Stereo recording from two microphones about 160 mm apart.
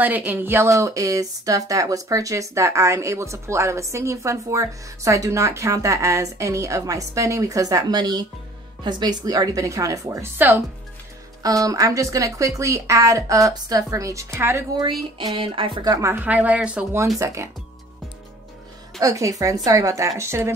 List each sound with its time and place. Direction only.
0.0 s speech: 10° right (ahead or behind)
14.8 s speech: 30° right (ahead or behind); by 17.0 s 5° right (ahead or behind)
17.2 s speech: 20° right (ahead or behind)
18.9 s speech: 20° right (ahead or behind)